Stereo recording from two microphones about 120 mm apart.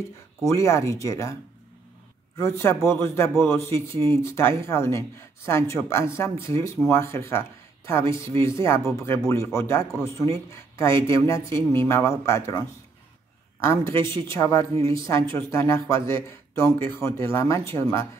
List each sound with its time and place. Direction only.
0.5 s a man's voice: 25° left (ahead or behind)
2.3 s a man's voice: 20° left (ahead or behind)
8.0 s speech: 45° right (ahead or behind)
8.4 s a man's voice: 25° left (ahead or behind)